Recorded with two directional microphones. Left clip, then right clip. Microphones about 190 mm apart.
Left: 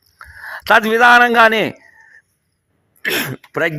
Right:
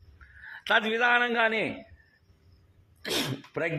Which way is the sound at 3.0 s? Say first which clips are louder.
Left 11 dB; 50° left (ahead or behind).